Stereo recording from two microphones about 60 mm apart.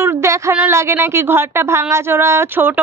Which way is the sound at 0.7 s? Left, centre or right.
Right.